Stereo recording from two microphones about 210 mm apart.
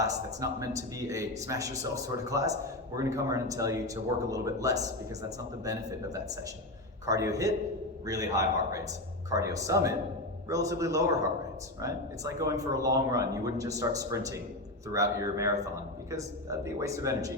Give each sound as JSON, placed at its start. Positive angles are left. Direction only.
{"t": 0.0, "sound": "speech", "side_deg": -15}
{"t": 7.0, "sound": "speech", "side_deg": -15}